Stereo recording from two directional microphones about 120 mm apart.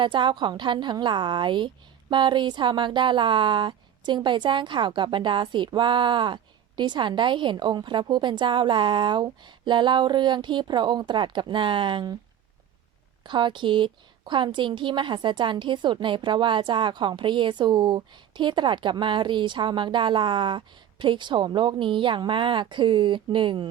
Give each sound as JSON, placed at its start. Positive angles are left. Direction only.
{"t": 0.0, "sound": "a woman's voice", "side_deg": -40}
{"t": 13.2, "sound": "a woman's voice", "side_deg": -40}